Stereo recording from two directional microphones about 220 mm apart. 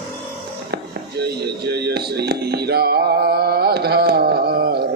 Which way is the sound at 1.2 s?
50° right (ahead or behind).